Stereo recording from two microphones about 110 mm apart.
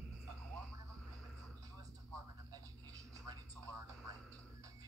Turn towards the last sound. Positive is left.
turn(degrees=15)  # may be behind; listen again after turning